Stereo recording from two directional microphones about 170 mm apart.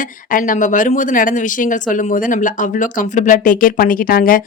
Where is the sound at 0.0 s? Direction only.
50° left (ahead or behind).